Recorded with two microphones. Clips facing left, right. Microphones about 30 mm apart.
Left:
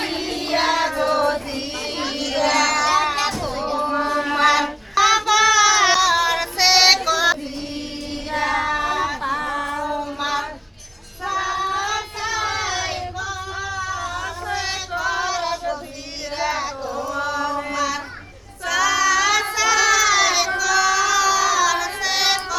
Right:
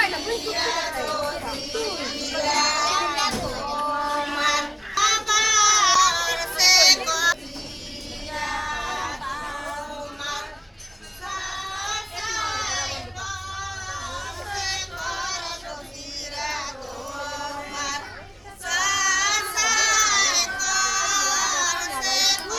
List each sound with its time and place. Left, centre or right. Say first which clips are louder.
0.3 s music: left 1 dB; left
0.5 s music: left 10 dB; left
1.7 s a sound: left 1 dB; left
3.2 s music: left 3 dB; centre
3.9 s mantra: left 4 dB; left
4.3 s child singing: left 6 dB; left
8.3 s child singing: left 7 dB; left
8.8 s music: left 7 dB; left
11.8 s child singing: left 6 dB; centre
13.8 s female singing: left 6 dB; centre
16.4 s chant: left 7 dB; centre
17.7 s child singing: left 6 dB; centre
19.5 s a sound: left 5 dB; centre
20.6 s child singing: left 6 dB; centre